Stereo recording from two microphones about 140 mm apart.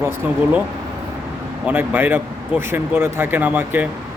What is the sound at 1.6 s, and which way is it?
Speech, 10° right (ahead or behind).